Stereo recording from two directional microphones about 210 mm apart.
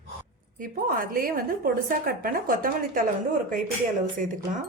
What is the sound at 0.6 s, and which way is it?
Speech, 40° right (ahead or behind).